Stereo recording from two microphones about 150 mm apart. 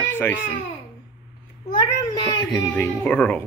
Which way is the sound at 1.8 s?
30° left (ahead or behind).